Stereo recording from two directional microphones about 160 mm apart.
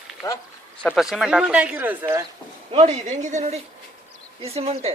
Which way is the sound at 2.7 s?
45° right (ahead or behind).